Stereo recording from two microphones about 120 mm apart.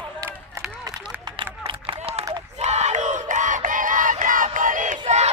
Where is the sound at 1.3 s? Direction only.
45° right (ahead or behind).